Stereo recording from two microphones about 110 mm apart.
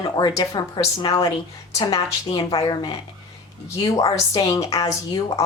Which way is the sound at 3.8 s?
40° left (ahead or behind).